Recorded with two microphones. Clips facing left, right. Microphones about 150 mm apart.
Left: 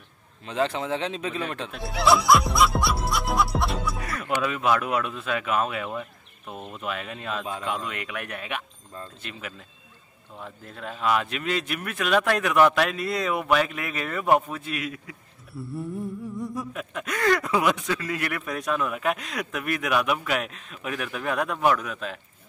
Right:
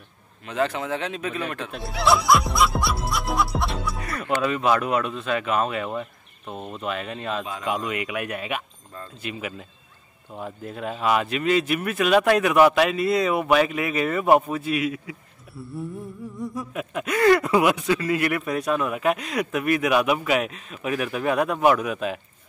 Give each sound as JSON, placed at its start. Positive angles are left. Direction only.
{"t": 0.5, "sound": "speech", "side_deg": 25}
{"t": 1.7, "sound": "speech", "side_deg": 0}